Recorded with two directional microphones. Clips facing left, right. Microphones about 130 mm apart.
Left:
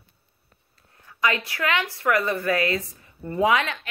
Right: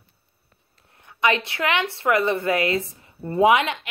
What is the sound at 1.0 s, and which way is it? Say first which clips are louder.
A woman's voice: right 3 dB; 25° right (ahead or behind).